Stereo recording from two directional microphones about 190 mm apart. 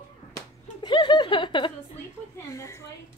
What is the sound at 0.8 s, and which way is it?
Chuckle, 25° left (ahead or behind).